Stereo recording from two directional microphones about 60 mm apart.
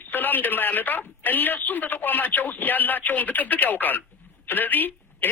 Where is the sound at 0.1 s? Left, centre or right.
Left.